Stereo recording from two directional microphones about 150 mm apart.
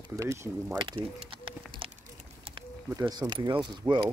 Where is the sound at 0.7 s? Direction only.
30° right (ahead or behind).